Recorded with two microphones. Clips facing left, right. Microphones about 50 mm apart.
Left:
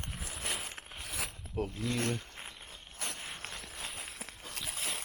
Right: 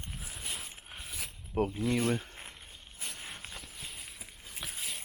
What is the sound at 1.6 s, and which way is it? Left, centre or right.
Speech, centre.